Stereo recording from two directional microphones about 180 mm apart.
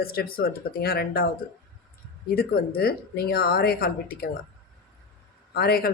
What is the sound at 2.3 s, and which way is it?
Speech, 60° left (ahead or behind).